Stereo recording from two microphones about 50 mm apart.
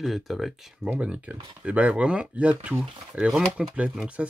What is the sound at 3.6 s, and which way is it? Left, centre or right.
Speech, centre.